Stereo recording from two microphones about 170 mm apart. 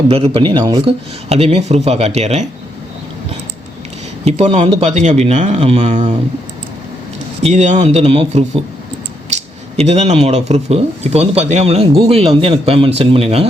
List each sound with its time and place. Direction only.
0.1 s speech: 30° right (ahead or behind)
0.9 s speech: 35° right (ahead or behind)
4.3 s speech: 40° right (ahead or behind)
7.4 s speech: 45° right (ahead or behind)